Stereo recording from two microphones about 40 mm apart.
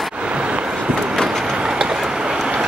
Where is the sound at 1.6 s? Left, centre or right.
Centre.